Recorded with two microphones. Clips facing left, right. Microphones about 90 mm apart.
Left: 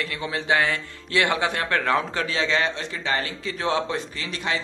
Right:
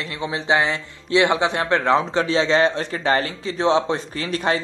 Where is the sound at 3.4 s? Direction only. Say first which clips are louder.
Right 7 dB; 25° right (ahead or behind).